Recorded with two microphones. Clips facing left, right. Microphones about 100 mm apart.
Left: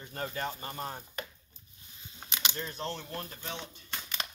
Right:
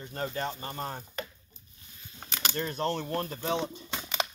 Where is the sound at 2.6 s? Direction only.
60° right (ahead or behind).